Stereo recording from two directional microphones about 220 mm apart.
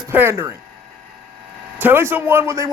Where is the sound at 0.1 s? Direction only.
10° right (ahead or behind).